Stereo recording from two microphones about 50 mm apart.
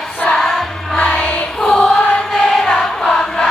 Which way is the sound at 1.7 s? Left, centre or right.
Left.